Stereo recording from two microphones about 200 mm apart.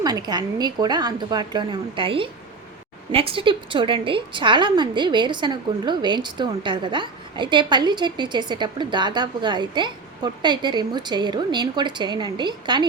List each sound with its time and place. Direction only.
0.0 s a woman's voice: 20° right (ahead or behind)